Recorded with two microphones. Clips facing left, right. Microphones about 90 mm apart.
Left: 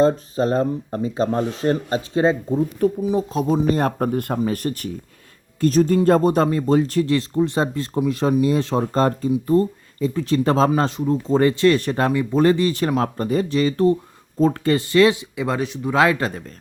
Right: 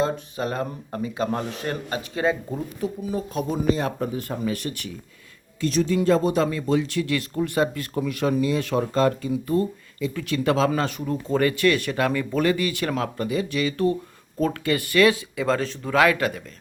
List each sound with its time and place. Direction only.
0.0 s speech: 35° left (ahead or behind)
3.8 s speech: 50° left (ahead or behind)
4.4 s speech: 40° left (ahead or behind)
12.1 s speech: 20° left (ahead or behind)
12.4 s speech: 30° left (ahead or behind)